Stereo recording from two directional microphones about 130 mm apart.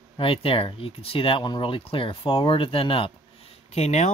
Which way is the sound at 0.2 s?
45° left (ahead or behind).